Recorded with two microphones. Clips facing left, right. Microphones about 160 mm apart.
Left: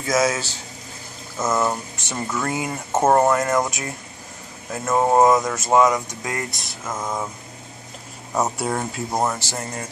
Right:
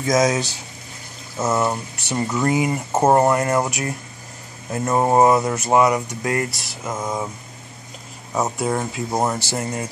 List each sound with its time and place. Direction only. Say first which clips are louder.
0.0 s speech: right 3 dB; 20° right (ahead or behind)
8.4 s speech: right 1 dB; 5° left (ahead or behind); by 9.8 s 10° right (ahead or behind)